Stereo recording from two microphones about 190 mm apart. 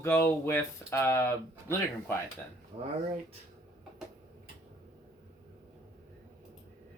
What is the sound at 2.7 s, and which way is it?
Speech, 35° right (ahead or behind).